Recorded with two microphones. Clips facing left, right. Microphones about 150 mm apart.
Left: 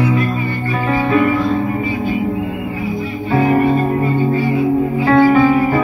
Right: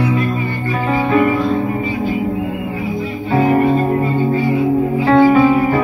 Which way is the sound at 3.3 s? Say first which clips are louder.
Even; 30° right (ahead or behind).